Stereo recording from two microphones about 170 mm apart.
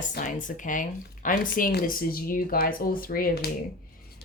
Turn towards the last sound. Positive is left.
turn(degrees=60)  # may be behind; listen again after turning